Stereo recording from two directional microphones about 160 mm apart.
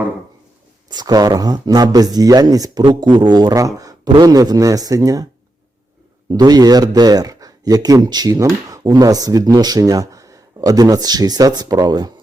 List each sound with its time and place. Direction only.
0.9 s speech: 25° right (ahead or behind)
6.3 s speech: 25° right (ahead or behind)